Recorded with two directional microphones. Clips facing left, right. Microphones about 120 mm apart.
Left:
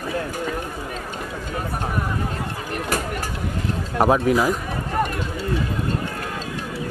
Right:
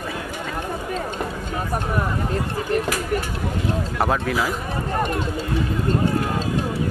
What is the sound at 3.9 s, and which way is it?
Speech, 15° left (ahead or behind).